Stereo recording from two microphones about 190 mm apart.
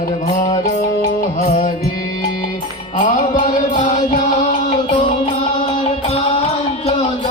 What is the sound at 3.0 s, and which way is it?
Music, 40° left (ahead or behind).